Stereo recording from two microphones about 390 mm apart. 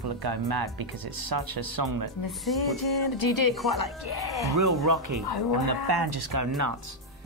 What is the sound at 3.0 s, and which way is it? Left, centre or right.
A woman's voice, left.